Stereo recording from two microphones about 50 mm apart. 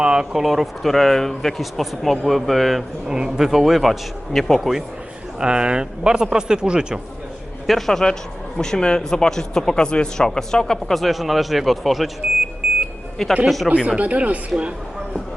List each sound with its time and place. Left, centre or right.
0.0 s speech: centre
3.1 s speech: centre
5.4 s speech: centre
7.7 s speech: centre
12.6 s a sound: right
13.4 s speech: centre
13.7 s speech: right